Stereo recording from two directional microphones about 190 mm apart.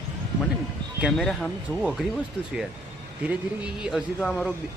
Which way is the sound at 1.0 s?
Centre (ahead or behind).